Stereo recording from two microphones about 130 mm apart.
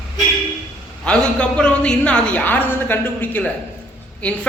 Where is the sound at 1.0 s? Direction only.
10° left (ahead or behind).